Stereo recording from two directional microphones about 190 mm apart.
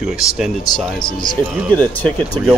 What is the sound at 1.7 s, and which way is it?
Speech, 10° left (ahead or behind).